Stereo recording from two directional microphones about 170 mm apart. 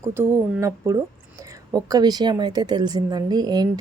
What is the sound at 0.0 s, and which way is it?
A woman's voice, 15° right (ahead or behind).